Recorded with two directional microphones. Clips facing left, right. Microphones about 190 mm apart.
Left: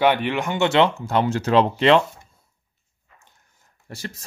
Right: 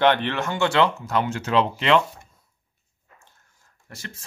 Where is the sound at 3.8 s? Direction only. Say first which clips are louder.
Left 6 dB; 35° left (ahead or behind).